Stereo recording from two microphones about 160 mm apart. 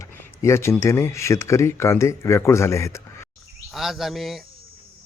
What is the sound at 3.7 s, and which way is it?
Speech, centre (ahead or behind).